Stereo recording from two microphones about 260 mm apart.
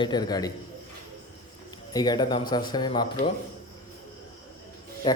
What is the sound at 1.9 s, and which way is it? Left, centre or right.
Speech, centre.